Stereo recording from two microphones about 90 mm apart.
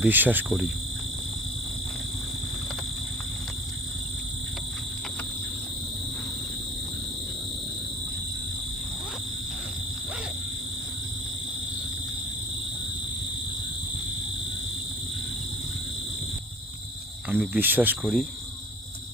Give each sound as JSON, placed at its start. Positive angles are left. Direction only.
{"t": 0.0, "sound": "insect", "side_deg": -20}
{"t": 17.2, "sound": "cricket", "side_deg": -15}
{"t": 18.0, "sound": "cricket", "side_deg": -5}